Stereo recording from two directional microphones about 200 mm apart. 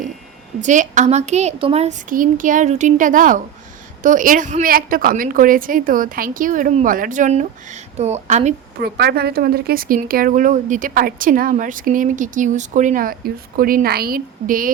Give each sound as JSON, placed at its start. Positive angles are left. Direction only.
{"t": 0.6, "sound": "a woman's voice", "side_deg": -40}
{"t": 8.8, "sound": "speech", "side_deg": -55}